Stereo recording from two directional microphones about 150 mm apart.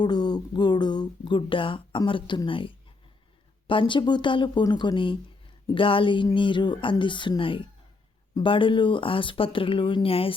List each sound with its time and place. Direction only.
0.0 s speech: 30° left (ahead or behind)